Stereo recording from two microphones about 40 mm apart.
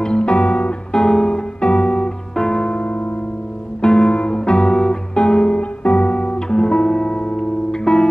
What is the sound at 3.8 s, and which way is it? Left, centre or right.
Music, left.